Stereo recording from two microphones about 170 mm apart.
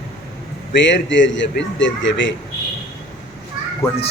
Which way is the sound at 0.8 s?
90° left.